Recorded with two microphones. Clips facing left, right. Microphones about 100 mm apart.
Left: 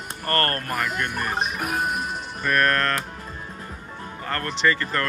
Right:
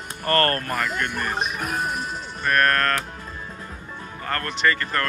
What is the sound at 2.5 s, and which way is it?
Music, 45° right (ahead or behind).